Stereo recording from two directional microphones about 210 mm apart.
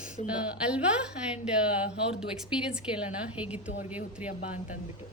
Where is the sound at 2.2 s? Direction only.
5° right (ahead or behind).